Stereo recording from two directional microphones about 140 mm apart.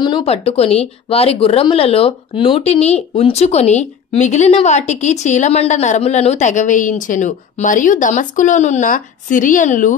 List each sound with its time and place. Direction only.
0.0 s speech: 40° left (ahead or behind); by 9.9 s 65° left (ahead or behind)